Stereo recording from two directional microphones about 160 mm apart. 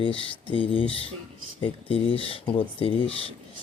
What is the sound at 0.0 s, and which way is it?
Speech, 35° left (ahead or behind).